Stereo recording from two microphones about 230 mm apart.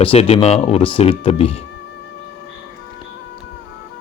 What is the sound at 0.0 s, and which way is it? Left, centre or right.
Speech, left.